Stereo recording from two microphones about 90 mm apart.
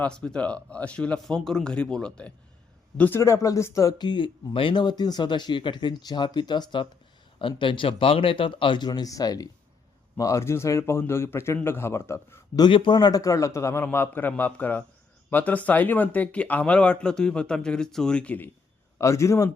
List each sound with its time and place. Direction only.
0.0 s speech: 10° left (ahead or behind)
3.2 s speech: 35° left (ahead or behind)
3.9 s speech: 55° left (ahead or behind)
7.3 s a man's voice: 70° left (ahead or behind); by 12.4 s 30° left (ahead or behind)
12.5 s a man's voice: 60° left (ahead or behind); by 18.5 s 15° left (ahead or behind)
18.9 s speech: 35° left (ahead or behind)